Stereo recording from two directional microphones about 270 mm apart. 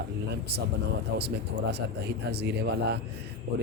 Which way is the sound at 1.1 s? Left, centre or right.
Right.